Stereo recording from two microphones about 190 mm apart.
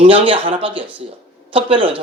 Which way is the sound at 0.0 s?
30° right (ahead or behind).